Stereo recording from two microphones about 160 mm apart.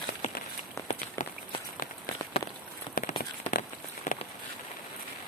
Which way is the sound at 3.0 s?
60° left (ahead or behind).